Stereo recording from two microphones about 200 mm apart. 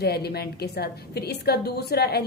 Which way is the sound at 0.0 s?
50° left (ahead or behind).